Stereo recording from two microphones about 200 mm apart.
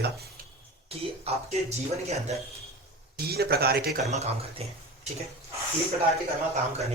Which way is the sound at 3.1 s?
50° right (ahead or behind).